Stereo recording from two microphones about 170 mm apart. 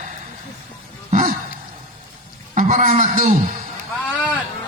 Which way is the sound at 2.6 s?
50° right (ahead or behind).